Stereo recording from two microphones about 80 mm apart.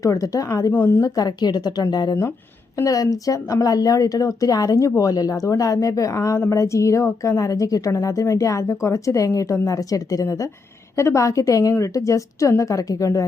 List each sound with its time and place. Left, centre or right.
0.0 s a woman's voice: left
2.7 s a woman's voice: left